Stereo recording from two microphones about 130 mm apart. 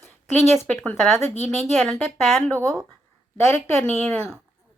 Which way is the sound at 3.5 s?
5° left (ahead or behind).